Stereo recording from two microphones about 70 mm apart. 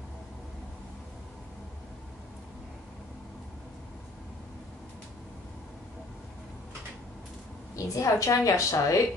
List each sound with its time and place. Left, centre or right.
7.7 s a woman's voice: left